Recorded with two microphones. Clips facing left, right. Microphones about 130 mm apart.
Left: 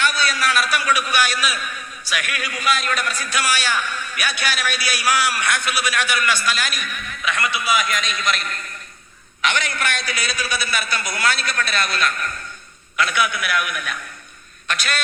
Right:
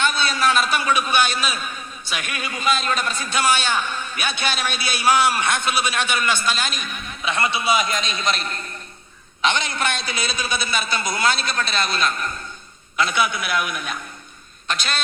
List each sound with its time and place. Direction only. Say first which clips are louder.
0.0 s a man's voice: right 1 dB; 25° right (ahead or behind)